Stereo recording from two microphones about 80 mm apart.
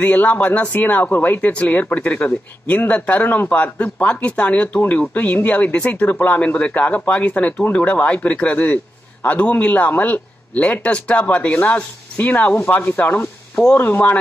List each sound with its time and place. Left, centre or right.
0.0 s speech: centre